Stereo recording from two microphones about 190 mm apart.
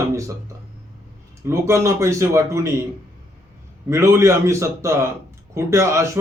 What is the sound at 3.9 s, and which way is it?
A man's voice, 15° right (ahead or behind).